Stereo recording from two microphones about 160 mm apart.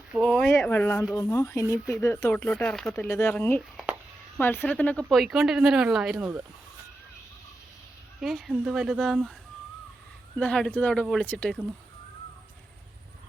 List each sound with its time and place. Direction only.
0.1 s speech: centre (ahead or behind)
0.7 s speech: 15° left (ahead or behind)
2.3 s speech: 5° left (ahead or behind)
3.0 s speech: 15° left (ahead or behind)
5.0 s speech: centre (ahead or behind)
8.2 s speech: centre (ahead or behind)
10.3 s speech: 5° left (ahead or behind)